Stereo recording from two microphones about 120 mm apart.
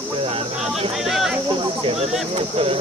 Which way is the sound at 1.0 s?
Centre (ahead or behind).